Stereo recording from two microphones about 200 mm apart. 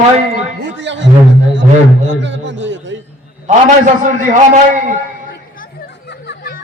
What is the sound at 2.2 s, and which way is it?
Speech, 65° right (ahead or behind).